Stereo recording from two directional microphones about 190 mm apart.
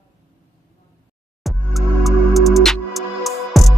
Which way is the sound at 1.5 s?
Centre (ahead or behind).